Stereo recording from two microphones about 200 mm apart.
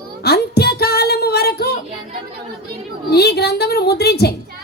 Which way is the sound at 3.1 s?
55° left (ahead or behind).